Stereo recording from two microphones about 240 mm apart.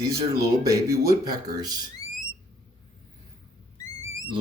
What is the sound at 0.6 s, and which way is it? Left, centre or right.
Speech, centre.